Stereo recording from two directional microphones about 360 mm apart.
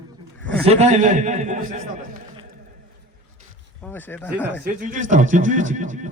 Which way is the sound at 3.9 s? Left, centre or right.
Centre.